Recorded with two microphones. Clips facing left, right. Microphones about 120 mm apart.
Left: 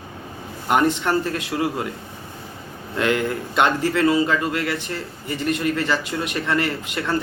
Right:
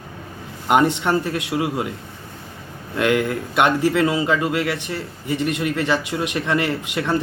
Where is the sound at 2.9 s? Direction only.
10° right (ahead or behind).